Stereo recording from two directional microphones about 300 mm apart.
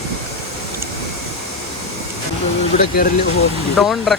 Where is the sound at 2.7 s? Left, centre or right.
Left.